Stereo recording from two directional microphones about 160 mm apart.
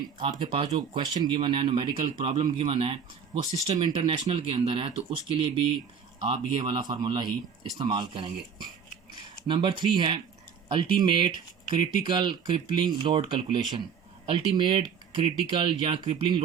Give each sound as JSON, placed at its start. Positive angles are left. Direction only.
{"t": 0.2, "sound": "speech", "side_deg": -35}
{"t": 2.3, "sound": "speech", "side_deg": -40}